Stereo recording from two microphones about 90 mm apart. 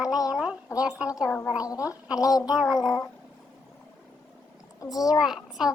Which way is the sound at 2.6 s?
5° right (ahead or behind).